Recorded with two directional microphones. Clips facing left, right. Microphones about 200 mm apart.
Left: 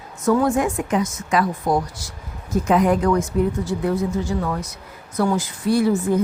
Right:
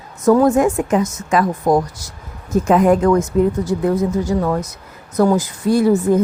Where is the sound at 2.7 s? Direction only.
45° right (ahead or behind).